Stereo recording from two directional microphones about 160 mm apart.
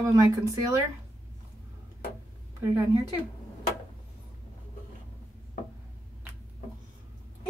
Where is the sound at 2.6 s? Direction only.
20° right (ahead or behind).